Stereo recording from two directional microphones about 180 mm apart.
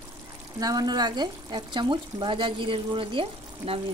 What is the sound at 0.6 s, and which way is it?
Speech, 20° right (ahead or behind).